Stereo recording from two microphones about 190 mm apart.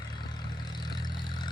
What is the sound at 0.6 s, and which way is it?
Vehicle, 20° left (ahead or behind).